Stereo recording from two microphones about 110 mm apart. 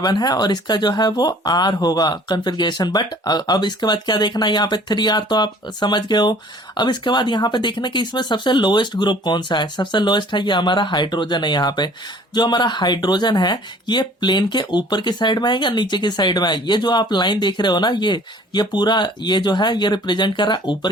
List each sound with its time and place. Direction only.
0.0 s speech: 40° left (ahead or behind)